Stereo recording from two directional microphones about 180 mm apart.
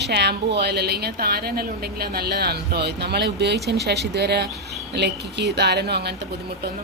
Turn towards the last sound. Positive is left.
turn(degrees=-65)  # may be behind; listen again after turning